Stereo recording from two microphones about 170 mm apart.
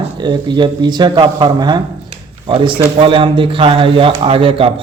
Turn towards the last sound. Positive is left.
turn(degrees=-30)  # may be behind; listen again after turning